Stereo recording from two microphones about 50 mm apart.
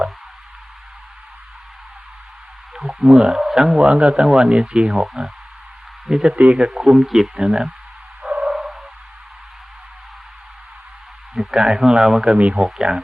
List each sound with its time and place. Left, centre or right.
3.0 s speech: centre
3.8 s speech: right
4.9 s speech: centre
6.3 s speech: right
6.9 s speech: centre
8.4 s a sound: centre
11.3 s speech: centre
12.4 s speech: right
12.9 s speech: centre